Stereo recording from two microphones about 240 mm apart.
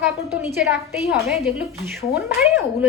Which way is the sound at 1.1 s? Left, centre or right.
Centre.